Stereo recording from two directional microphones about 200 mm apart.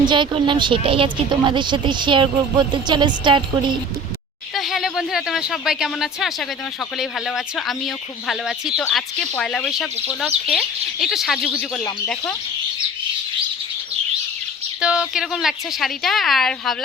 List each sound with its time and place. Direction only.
0.0 s a woman's voice: 25° right (ahead or behind)
4.5 s speech: centre (ahead or behind)
14.8 s speech: 5° right (ahead or behind)